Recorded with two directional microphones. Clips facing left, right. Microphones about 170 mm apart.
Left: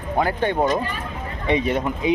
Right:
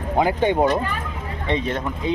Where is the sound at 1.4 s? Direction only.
10° left (ahead or behind).